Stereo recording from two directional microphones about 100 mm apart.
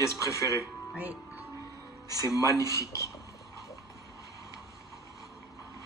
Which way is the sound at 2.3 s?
35° left (ahead or behind).